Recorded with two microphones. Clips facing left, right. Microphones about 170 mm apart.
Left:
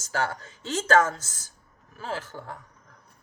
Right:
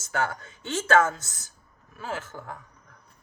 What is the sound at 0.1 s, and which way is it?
A man's voice, 30° left (ahead or behind).